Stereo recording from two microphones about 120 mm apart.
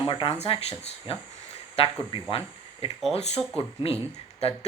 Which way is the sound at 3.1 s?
65° left (ahead or behind).